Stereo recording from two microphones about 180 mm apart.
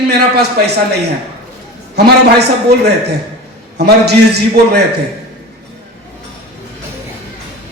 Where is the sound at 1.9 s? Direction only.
65° right (ahead or behind).